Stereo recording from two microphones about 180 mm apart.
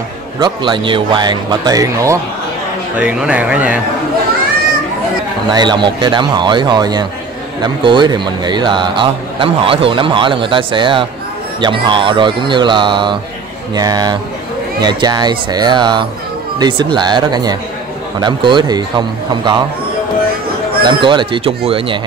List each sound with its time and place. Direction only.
0.4 s speech: 25° right (ahead or behind)
3.0 s speech: 5° right (ahead or behind)
5.5 s speech: 25° right (ahead or behind)
20.8 s speech: 25° right (ahead or behind)